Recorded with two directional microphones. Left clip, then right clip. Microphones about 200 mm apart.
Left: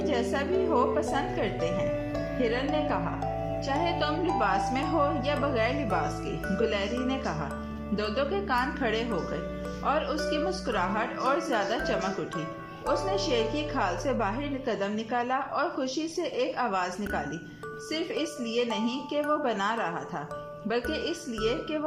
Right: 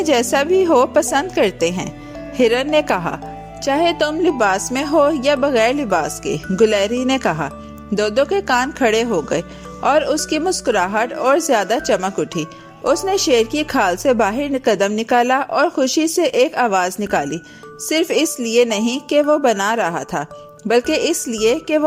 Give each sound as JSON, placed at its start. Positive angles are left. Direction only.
{"t": 0.1, "sound": "a woman's voice", "side_deg": -45}